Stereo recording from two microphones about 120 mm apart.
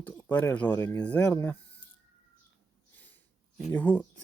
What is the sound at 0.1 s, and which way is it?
Speech, 15° left (ahead or behind).